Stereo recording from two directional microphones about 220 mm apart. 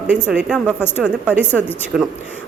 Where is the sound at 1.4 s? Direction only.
10° left (ahead or behind).